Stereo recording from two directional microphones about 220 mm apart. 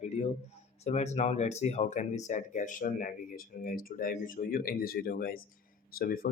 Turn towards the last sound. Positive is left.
turn(degrees=40)  # may be behind; listen again after turning